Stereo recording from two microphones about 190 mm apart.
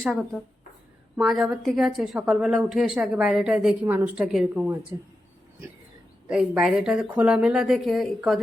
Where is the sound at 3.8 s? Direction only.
15° right (ahead or behind).